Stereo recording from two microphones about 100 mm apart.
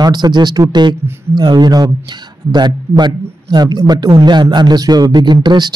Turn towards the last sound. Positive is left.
turn(degrees=-45)  # may be behind; listen again after turning